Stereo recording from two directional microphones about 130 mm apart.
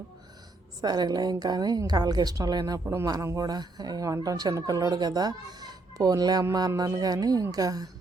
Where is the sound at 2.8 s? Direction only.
20° right (ahead or behind).